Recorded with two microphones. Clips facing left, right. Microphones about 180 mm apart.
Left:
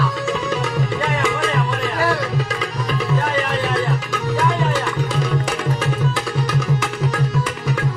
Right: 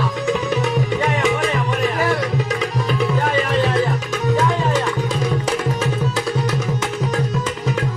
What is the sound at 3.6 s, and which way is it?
Tabla, 20° right (ahead or behind).